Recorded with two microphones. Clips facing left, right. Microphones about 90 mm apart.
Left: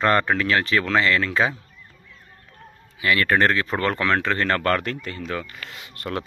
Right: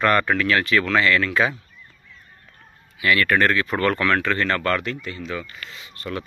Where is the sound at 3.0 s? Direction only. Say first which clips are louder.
Even; 30° left (ahead or behind).